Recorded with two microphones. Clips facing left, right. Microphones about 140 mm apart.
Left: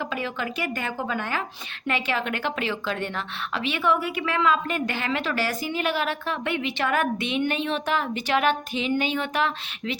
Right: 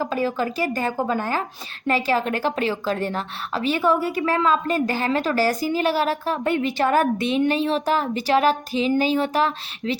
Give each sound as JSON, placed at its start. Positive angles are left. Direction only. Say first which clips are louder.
{"t": 0.0, "sound": "a woman's voice", "louder": "right 6 dB", "side_deg": -35}